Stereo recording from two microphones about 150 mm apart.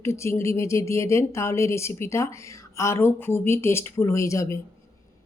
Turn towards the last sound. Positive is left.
turn(degrees=20)  # may be behind; listen again after turning